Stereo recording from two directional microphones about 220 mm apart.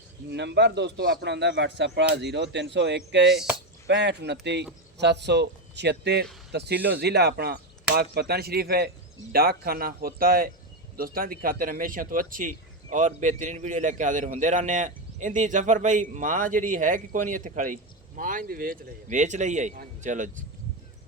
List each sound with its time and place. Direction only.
0.3 s a man's voice: 50° right (ahead or behind); by 20.4 s 35° right (ahead or behind)